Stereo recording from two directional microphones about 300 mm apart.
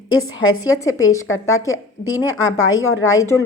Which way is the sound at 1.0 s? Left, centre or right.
Left.